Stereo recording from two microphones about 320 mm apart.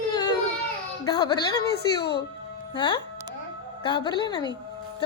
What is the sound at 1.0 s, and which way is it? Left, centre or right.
Speech, centre.